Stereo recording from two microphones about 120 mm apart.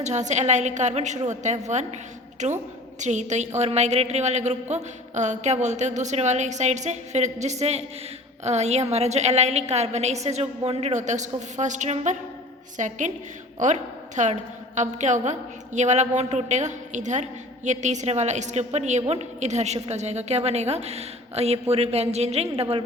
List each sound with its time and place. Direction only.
0.0 s a woman's voice: 75° right (ahead or behind)
2.4 s a woman's voice: 90° right
3.0 s a woman's voice: 80° right
12.7 s a woman's voice: 90° right; by 22.8 s 55° right (ahead or behind)